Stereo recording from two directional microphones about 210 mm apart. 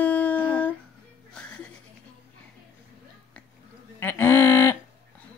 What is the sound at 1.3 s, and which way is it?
Music, 5° left (ahead or behind).